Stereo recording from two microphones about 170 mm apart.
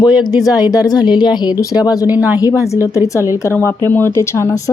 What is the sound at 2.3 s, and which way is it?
Speech, 20° left (ahead or behind).